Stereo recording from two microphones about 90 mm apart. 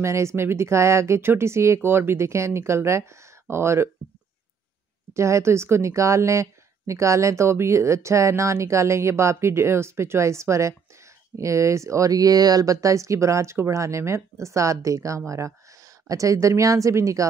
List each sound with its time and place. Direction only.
0.0 s speech: 30° right (ahead or behind)
5.1 s speech: 30° right (ahead or behind)